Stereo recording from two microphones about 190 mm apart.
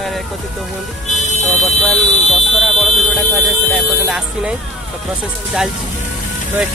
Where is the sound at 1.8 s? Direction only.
Centre (ahead or behind).